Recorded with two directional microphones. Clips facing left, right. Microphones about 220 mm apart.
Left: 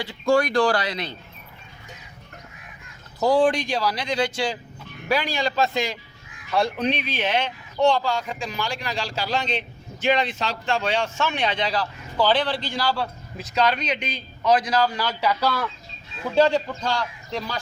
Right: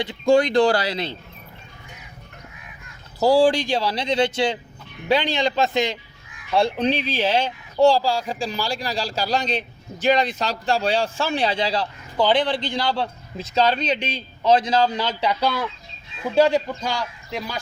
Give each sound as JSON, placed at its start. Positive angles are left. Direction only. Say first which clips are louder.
{"t": 0.0, "sound": "a man's voice", "louder": "right 3 dB", "side_deg": -20}
{"t": 3.2, "sound": "a man's voice", "louder": "right 3 dB", "side_deg": -30}
{"t": 12.1, "sound": "a man's voice", "louder": "right 2 dB", "side_deg": -15}